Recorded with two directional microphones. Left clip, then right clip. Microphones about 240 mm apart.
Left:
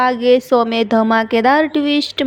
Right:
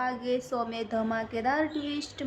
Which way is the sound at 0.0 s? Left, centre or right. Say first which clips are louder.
Left 17 dB; left.